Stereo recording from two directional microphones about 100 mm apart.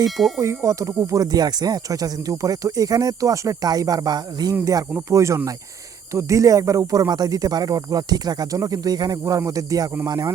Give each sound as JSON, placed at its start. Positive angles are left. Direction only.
{"t": 0.3, "sound": "speech", "side_deg": -30}